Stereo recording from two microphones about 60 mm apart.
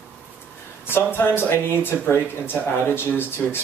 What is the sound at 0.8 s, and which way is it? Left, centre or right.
Speech, left.